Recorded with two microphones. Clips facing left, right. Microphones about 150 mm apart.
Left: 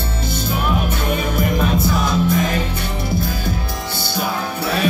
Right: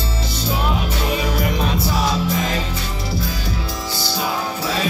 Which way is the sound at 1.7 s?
50° left (ahead or behind).